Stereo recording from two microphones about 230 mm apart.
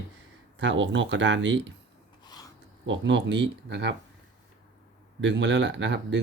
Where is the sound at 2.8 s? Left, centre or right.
Right.